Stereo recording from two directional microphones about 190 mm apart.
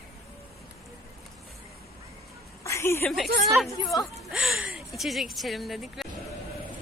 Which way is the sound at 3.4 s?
Centre (ahead or behind).